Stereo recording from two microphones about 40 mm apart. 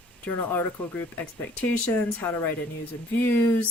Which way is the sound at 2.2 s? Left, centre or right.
Left.